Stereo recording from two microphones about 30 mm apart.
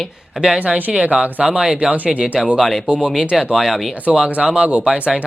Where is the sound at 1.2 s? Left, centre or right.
Right.